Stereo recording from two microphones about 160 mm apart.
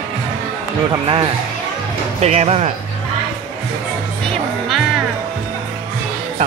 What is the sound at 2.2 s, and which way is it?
Speech, 45° right (ahead or behind).